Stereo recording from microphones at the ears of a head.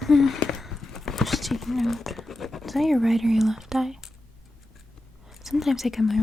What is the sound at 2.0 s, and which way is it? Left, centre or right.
Speech, left.